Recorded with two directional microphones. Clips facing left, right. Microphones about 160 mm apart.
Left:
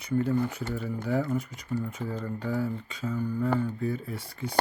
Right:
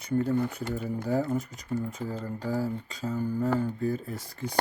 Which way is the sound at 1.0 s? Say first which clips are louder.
Even; 40° right (ahead or behind).